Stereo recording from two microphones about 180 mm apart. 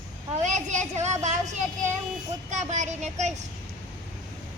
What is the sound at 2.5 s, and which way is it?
Speech, 40° right (ahead or behind).